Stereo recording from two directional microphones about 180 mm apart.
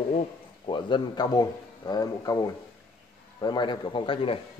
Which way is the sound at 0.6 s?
25° left (ahead or behind).